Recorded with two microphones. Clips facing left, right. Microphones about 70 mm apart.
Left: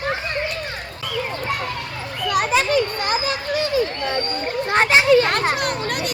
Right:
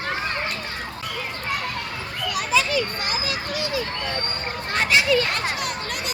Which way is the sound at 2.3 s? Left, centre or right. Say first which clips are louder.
Left 4 dB; left.